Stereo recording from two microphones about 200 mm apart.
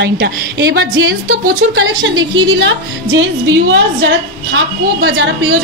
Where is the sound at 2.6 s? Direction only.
70° right (ahead or behind).